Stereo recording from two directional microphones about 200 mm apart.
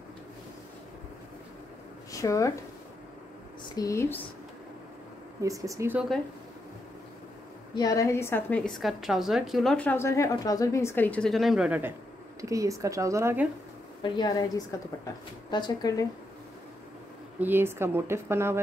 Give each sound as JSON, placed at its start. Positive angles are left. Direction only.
{"t": 2.1, "sound": "speech", "side_deg": 15}
{"t": 3.7, "sound": "a woman's voice", "side_deg": 15}
{"t": 5.4, "sound": "a woman's voice", "side_deg": -15}
{"t": 7.7, "sound": "a woman's voice", "side_deg": 15}
{"t": 12.4, "sound": "a woman's voice", "side_deg": -15}
{"t": 14.0, "sound": "a woman's voice", "side_deg": 20}
{"t": 17.4, "sound": "a woman's voice", "side_deg": -10}